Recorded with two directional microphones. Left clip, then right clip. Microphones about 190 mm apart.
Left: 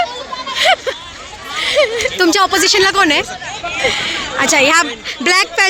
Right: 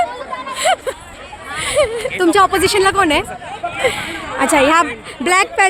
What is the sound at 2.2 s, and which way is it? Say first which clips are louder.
A woman's voice: right 1 dB; 5° left (ahead or behind).